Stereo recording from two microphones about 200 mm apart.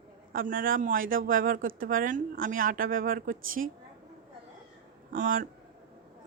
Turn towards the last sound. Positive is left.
turn(degrees=-45)  # may be behind; listen again after turning